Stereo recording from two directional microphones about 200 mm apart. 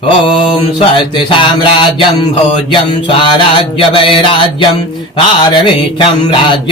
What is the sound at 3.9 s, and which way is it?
Mantra, 25° left (ahead or behind).